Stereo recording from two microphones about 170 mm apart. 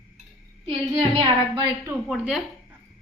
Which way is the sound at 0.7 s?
35° right (ahead or behind).